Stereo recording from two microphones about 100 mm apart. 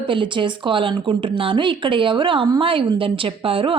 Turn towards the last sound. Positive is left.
turn(degrees=-65)  # may be behind; listen again after turning